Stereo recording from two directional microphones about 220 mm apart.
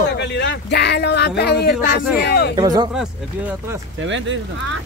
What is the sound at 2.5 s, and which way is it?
Speech, 20° right (ahead or behind).